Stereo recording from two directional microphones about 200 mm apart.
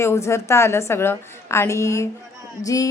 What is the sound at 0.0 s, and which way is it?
A woman's voice, 15° left (ahead or behind).